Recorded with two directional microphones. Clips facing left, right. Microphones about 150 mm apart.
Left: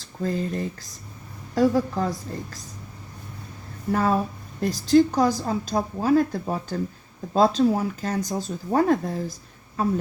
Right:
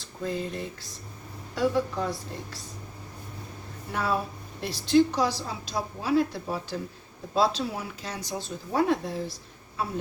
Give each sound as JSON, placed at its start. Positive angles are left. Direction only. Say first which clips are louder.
{"t": 0.0, "sound": "a sound", "louder": "left 4 dB", "side_deg": 40}
{"t": 1.5, "sound": "a woman's voice", "louder": "left 5 dB", "side_deg": 40}
{"t": 3.9, "sound": "speech", "louder": "left 6 dB", "side_deg": 45}